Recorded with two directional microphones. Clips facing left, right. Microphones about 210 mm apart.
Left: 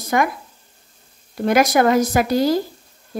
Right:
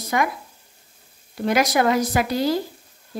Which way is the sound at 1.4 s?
50° left (ahead or behind).